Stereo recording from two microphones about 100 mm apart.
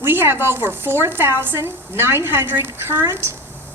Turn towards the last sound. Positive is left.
turn(degrees=-25)  # may be behind; listen again after turning